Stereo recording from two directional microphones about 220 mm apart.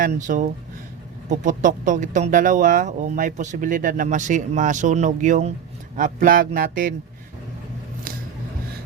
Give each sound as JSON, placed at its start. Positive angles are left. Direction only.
{"t": 0.0, "sound": "speech", "side_deg": -35}